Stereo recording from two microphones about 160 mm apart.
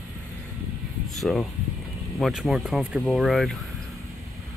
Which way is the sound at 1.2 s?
Centre (ahead or behind).